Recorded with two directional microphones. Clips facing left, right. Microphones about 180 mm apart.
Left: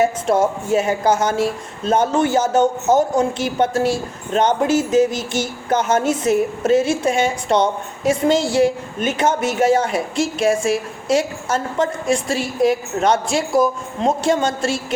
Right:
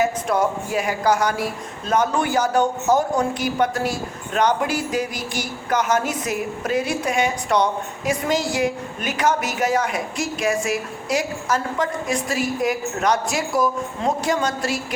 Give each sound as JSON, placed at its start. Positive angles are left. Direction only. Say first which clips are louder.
{"t": 0.0, "sound": "speech", "louder": "left 4 dB", "side_deg": 25}